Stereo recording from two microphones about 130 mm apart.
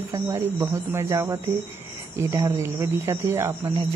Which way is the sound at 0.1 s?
20° right (ahead or behind).